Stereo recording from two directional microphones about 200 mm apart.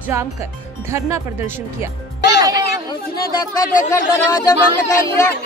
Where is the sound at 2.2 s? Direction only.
55° left (ahead or behind).